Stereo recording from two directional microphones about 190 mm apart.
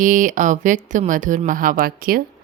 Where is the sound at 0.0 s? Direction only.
45° right (ahead or behind).